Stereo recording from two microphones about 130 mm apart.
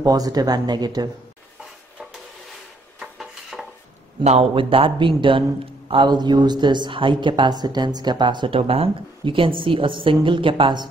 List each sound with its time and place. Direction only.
0.0 s speech: 30° right (ahead or behind)
3.0 s stir: centre (ahead or behind)
4.2 s a man's voice: 60° right (ahead or behind)
4.6 s speech: 45° right (ahead or behind)